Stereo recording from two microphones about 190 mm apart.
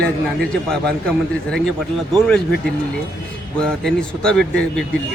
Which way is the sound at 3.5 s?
5° left (ahead or behind).